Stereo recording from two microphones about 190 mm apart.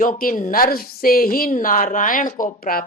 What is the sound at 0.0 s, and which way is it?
A woman's voice, 45° left (ahead or behind).